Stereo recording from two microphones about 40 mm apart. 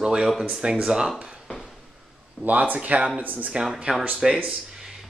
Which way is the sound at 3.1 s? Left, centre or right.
Right.